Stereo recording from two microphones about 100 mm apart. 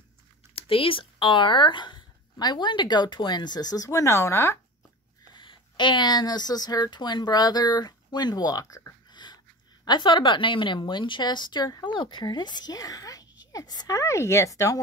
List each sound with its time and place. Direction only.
0.6 s speech: 65° left (ahead or behind); by 4.6 s 25° left (ahead or behind)
5.3 s speech: 55° left (ahead or behind)
9.1 s a sound: 45° left (ahead or behind)
9.8 s speech: 50° left (ahead or behind); by 14.8 s 30° left (ahead or behind)